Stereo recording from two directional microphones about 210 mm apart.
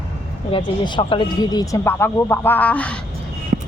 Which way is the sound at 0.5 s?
25° left (ahead or behind).